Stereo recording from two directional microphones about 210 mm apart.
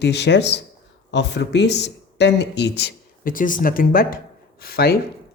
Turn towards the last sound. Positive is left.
turn(degrees=45)  # may be behind; listen again after turning